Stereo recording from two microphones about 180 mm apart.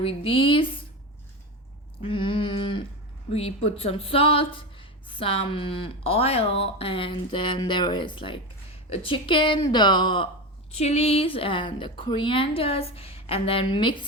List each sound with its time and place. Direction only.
0.0 s speech: 30° left (ahead or behind)
2.0 s a sound: 30° left (ahead or behind)
3.2 s speech: 35° left (ahead or behind)
10.8 s speech: 35° left (ahead or behind)